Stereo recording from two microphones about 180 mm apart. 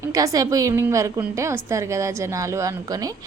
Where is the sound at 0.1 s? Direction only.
20° right (ahead or behind).